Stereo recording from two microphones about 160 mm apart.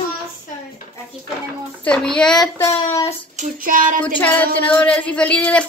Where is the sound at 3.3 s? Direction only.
60° right (ahead or behind).